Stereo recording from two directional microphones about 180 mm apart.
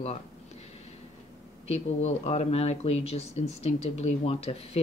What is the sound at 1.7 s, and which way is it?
Speech, 35° left (ahead or behind).